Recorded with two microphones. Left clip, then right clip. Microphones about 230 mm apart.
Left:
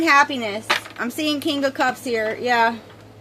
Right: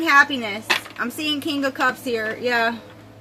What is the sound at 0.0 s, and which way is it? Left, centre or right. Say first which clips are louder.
Speech: even; left.